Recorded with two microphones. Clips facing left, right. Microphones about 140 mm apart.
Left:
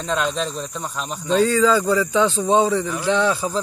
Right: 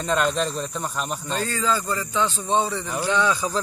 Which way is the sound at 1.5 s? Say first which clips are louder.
Left 8 dB; 75° left (ahead or behind).